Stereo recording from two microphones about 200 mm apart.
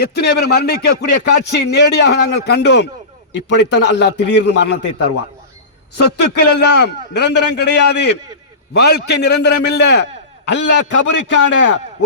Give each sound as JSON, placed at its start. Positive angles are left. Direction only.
{"t": 0.0, "sound": "a man's voice", "side_deg": 55}
{"t": 6.1, "sound": "a man's voice", "side_deg": 55}